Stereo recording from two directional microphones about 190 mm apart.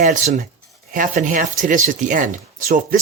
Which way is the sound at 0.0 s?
45° right (ahead or behind).